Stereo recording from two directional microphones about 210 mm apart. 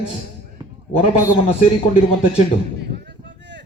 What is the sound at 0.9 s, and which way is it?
A man's voice, 25° left (ahead or behind).